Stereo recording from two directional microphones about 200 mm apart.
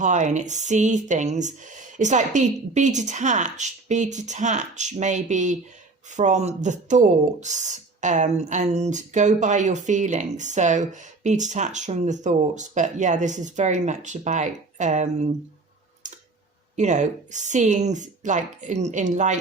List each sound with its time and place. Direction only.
0.0 s speech: 40° right (ahead or behind)
16.0 s clicking: 40° right (ahead or behind)
16.7 s speech: 35° right (ahead or behind)